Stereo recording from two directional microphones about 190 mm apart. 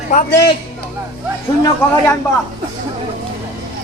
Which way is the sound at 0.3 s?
60° left (ahead or behind).